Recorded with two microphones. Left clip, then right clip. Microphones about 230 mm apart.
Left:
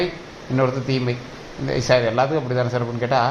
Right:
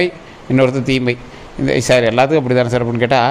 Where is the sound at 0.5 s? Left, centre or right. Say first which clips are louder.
Right 7 dB; right.